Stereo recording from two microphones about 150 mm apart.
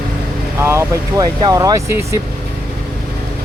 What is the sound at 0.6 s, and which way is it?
Speech, 20° right (ahead or behind).